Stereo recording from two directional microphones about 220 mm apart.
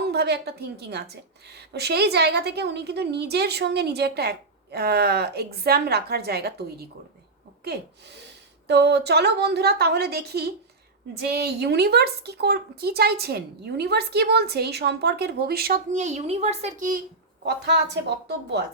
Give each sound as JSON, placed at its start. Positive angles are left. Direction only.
{"t": 0.0, "sound": "a woman's voice", "side_deg": -50}
{"t": 17.4, "sound": "a woman's voice", "side_deg": -50}